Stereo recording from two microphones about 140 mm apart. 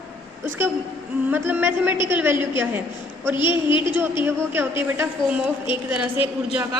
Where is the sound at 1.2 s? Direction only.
15° right (ahead or behind).